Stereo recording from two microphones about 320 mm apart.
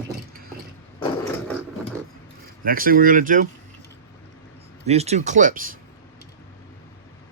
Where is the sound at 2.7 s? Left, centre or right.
Right.